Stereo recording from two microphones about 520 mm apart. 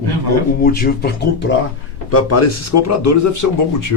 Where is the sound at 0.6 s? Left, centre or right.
Centre.